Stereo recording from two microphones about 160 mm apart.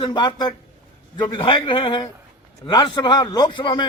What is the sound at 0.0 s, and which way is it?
A man's voice, 25° left (ahead or behind).